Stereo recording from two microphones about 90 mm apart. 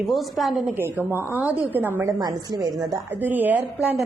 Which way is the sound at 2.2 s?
45° right (ahead or behind).